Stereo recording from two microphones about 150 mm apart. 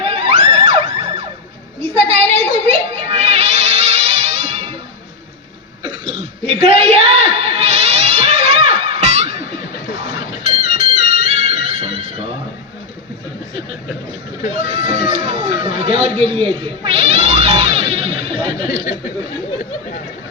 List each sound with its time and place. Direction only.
0.0 s music: 40° right (ahead or behind)
6.5 s cat: 45° right (ahead or behind)
10.4 s music: 45° right (ahead or behind)
14.5 s a sound: 40° right (ahead or behind)